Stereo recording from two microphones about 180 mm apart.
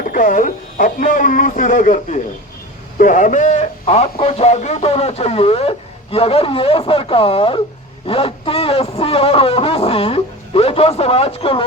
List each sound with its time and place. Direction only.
0.1 s speech: 50° left (ahead or behind); by 11.6 s 30° left (ahead or behind)